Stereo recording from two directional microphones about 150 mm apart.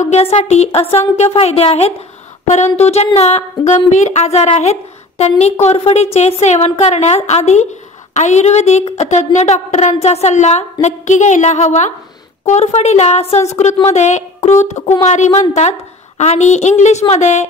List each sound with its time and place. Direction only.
0.0 s a woman's voice: 45° left (ahead or behind)